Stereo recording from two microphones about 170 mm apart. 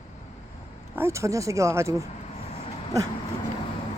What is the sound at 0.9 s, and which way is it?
A woman's voice, 15° right (ahead or behind).